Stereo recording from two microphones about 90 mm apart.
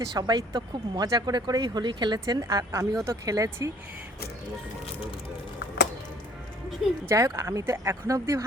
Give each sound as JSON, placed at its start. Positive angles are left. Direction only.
{"t": 0.1, "sound": "speech", "side_deg": -50}
{"t": 7.0, "sound": "speech", "side_deg": -35}